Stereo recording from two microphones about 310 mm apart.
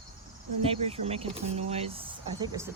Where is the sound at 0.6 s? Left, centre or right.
Centre.